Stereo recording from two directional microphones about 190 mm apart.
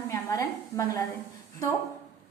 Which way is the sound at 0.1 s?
15° left (ahead or behind).